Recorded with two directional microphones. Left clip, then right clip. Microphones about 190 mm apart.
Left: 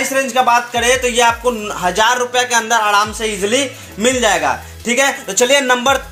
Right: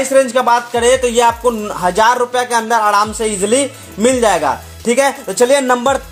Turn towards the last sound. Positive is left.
turn(degrees=-45)  # may be behind; listen again after turning